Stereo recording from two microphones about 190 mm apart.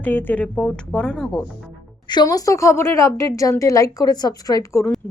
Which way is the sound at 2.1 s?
20° left (ahead or behind).